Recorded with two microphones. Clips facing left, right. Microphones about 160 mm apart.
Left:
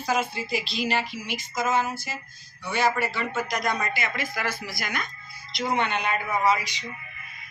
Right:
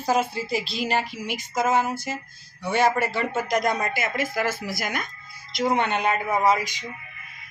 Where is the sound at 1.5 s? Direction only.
55° right (ahead or behind).